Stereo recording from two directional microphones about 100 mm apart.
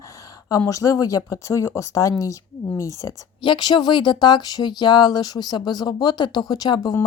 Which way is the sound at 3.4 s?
50° left (ahead or behind).